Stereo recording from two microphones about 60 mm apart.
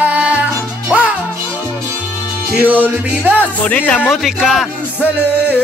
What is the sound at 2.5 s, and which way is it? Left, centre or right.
Music, right.